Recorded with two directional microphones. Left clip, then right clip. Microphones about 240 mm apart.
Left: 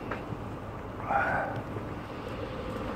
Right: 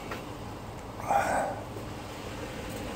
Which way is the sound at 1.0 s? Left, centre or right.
Right.